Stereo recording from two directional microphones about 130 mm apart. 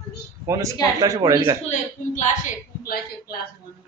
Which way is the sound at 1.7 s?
75° left (ahead or behind).